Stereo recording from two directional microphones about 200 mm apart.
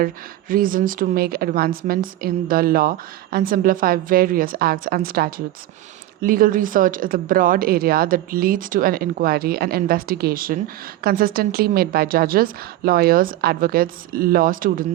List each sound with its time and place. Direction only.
0.0 s a woman's voice: 45° right (ahead or behind)